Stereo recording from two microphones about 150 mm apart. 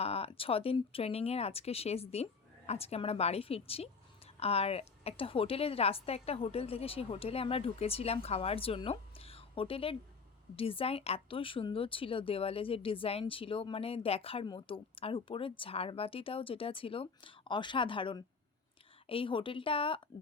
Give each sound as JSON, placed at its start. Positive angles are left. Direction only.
{"t": 0.0, "sound": "speech", "side_deg": 40}